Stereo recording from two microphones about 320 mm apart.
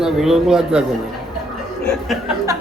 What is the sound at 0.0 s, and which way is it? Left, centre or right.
A man's voice, centre.